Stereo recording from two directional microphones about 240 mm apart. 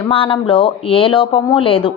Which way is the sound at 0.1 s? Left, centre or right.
Left.